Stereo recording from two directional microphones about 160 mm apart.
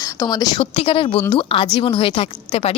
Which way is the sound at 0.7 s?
35° left (ahead or behind).